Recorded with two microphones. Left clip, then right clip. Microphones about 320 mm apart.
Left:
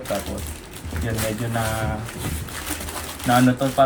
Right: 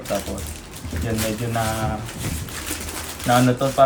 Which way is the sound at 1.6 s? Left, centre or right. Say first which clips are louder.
Right 1 dB; centre.